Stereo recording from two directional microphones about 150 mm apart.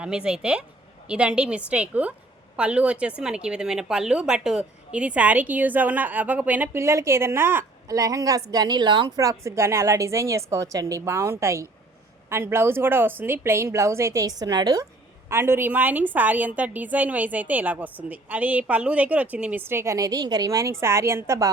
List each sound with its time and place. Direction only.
0.0 s a woman's voice: 5° right (ahead or behind)